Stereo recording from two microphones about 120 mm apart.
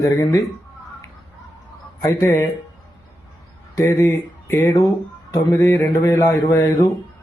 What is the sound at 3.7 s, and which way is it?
Speech, 25° left (ahead or behind).